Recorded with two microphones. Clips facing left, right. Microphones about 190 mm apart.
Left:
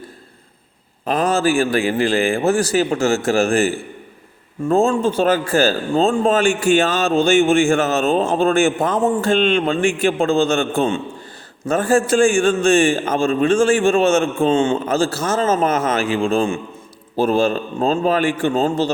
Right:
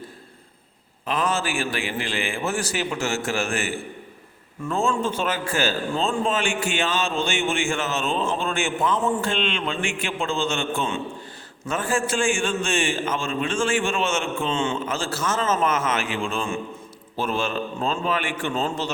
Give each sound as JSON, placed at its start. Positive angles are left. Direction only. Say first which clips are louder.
{"t": 1.0, "sound": "a man's voice", "louder": "left 8 dB", "side_deg": 40}